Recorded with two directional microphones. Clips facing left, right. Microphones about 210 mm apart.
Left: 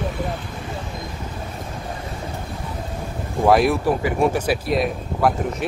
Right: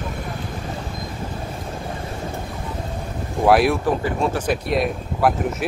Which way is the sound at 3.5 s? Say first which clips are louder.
Even; centre (ahead or behind).